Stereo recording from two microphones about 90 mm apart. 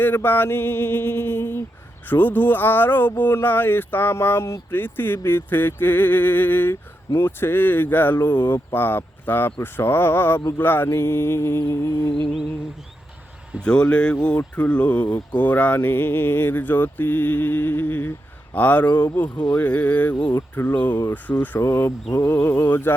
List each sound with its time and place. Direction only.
0.0 s speech: 20° left (ahead or behind)
13.6 s speech: 10° left (ahead or behind)